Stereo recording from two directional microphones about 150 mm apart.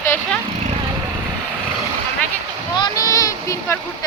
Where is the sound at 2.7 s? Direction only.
25° left (ahead or behind).